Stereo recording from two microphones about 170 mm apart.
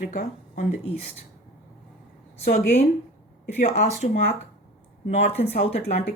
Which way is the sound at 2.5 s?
45° left (ahead or behind).